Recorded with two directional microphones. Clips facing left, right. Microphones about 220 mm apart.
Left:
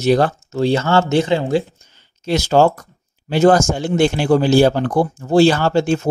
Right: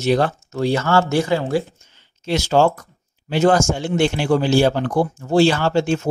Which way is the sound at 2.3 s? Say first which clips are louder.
Left 2 dB; 40° left (ahead or behind).